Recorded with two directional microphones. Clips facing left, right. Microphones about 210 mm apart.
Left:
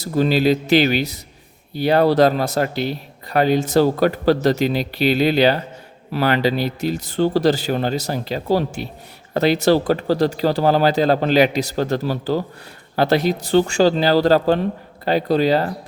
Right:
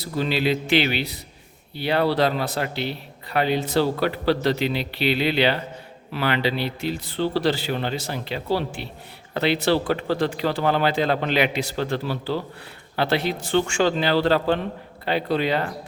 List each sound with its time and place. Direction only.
0.0 s speech: 45° left (ahead or behind)